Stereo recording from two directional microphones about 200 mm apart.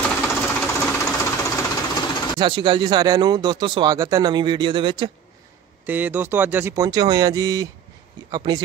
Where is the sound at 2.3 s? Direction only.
25° right (ahead or behind).